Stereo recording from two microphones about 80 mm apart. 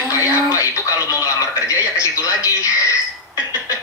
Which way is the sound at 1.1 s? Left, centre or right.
Left.